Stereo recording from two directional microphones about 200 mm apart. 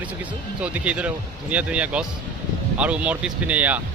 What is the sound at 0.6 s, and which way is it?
Speech, 5° right (ahead or behind).